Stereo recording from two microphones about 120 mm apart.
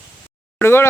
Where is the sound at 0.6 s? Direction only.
20° left (ahead or behind).